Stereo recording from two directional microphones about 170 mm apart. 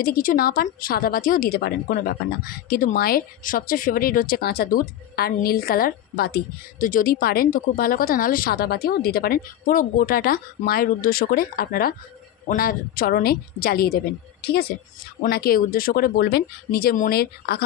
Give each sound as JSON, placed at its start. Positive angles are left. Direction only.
{"t": 0.0, "sound": "a woman's voice", "side_deg": 55}